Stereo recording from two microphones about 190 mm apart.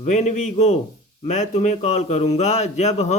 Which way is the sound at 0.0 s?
40° left (ahead or behind).